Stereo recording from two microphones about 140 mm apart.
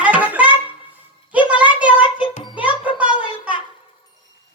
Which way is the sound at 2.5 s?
10° right (ahead or behind).